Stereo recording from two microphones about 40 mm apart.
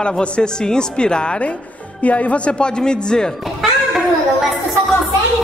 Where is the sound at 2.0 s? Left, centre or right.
Left; by 3.3 s centre.